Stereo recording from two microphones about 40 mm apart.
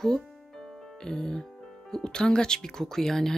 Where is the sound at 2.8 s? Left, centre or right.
Centre.